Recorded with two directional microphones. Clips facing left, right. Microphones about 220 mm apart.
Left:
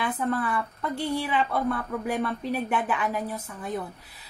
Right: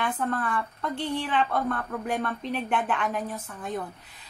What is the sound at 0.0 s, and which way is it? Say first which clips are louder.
A woman's voice: left 1 dB; 10° left (ahead or behind).